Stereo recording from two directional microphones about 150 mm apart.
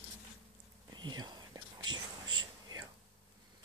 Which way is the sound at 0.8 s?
30° right (ahead or behind).